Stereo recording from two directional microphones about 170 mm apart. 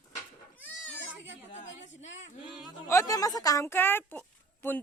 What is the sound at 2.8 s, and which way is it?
A woman's voice, 20° left (ahead or behind).